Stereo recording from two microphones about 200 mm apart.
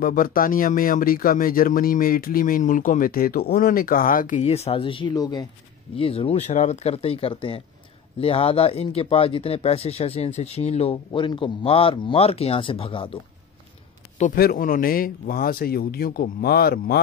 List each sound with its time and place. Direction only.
0.0 s speech: 45° left (ahead or behind); by 13.2 s 25° left (ahead or behind)
14.1 s speech: 45° left (ahead or behind)